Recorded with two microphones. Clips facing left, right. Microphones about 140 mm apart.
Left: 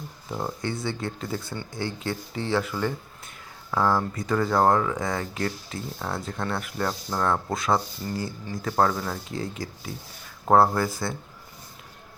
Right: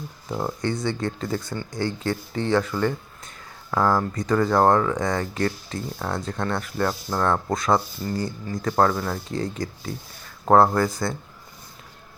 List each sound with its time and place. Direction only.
0.3 s speech: 25° right (ahead or behind)
0.6 s speech: 5° left (ahead or behind)
8.8 s speech: 10° left (ahead or behind)